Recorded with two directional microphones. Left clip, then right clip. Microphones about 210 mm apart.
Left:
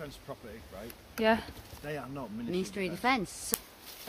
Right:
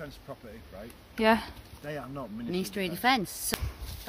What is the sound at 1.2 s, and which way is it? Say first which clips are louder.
Speech: right 3 dB; 20° right (ahead or behind).